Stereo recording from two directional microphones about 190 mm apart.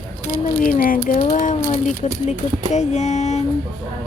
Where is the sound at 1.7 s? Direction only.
35° left (ahead or behind).